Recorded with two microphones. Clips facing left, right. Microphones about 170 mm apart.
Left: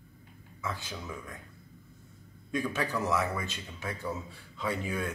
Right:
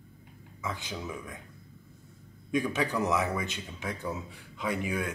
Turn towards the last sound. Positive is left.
turn(degrees=-15)  # may be behind; listen again after turning